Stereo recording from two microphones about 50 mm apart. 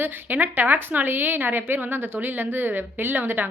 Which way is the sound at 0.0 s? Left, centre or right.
Right.